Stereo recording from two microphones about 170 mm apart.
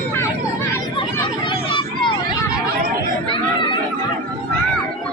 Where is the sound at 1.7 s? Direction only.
30° left (ahead or behind).